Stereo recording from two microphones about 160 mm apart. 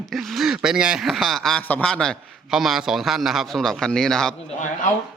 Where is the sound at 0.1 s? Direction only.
Centre (ahead or behind).